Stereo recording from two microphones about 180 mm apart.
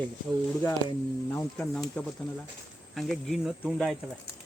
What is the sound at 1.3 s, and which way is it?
Speech, 10° left (ahead or behind).